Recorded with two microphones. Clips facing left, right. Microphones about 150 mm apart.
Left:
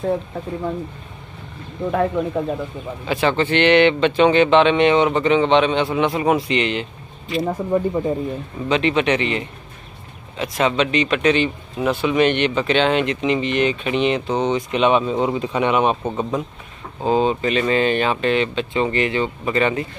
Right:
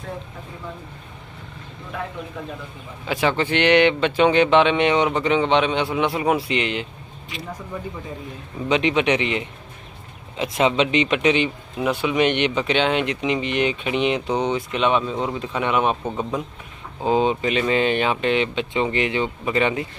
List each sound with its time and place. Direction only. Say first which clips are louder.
1.9 s speech: left 12 dB; 50° left (ahead or behind)
3.1 s speech: left 2 dB; 10° right (ahead or behind)
7.4 s speech: left 12 dB; 50° left (ahead or behind)
8.6 s speech: left 1 dB; 15° right (ahead or behind)
14.7 s speech: left 4 dB; 5° left (ahead or behind)
17.0 s speech: left 1 dB; 15° right (ahead or behind)